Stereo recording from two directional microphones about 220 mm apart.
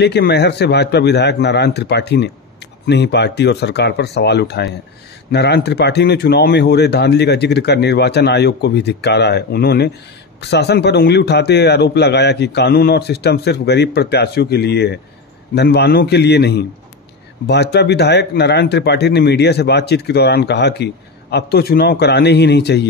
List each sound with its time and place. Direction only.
0.0 s speech: 50° left (ahead or behind)